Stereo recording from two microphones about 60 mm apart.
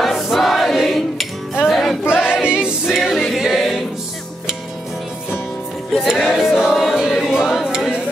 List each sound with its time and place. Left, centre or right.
0.0 s choir: centre
1.7 s music: centre
2.1 s choir: centre
2.9 s a capella: centre
6.0 s a sound: centre